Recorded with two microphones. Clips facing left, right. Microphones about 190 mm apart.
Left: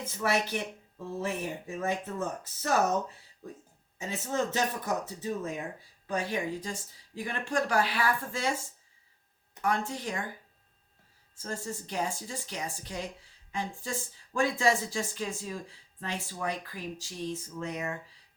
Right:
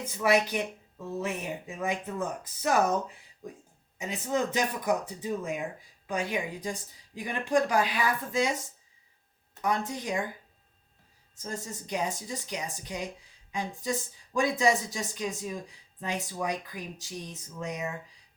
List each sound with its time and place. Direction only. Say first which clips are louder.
0.0 s speech: right 4 dB; 15° right (ahead or behind)
3.9 s speech: right 2 dB; 15° right (ahead or behind)
11.4 s speech: even; 15° right (ahead or behind)